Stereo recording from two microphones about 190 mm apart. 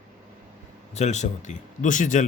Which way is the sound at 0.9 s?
35° left (ahead or behind).